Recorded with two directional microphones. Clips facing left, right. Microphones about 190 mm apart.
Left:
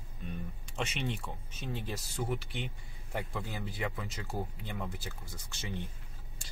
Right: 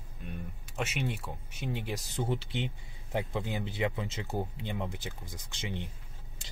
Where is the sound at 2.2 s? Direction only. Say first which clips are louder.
Right 3 dB; 25° right (ahead or behind).